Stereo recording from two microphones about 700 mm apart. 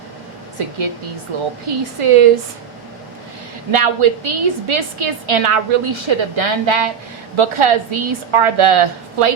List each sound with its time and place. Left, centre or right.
1.3 s a woman's voice: right
3.7 s a woman's voice: right